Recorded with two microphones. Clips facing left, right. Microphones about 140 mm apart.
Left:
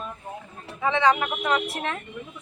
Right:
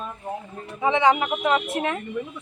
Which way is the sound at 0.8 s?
20° right (ahead or behind).